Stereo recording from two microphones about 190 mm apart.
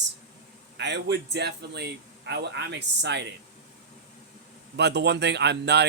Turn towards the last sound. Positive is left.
turn(degrees=-65)  # may be behind; listen again after turning